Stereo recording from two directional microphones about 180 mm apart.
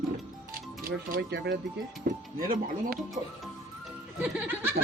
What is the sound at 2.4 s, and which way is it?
Speech, 50° right (ahead or behind).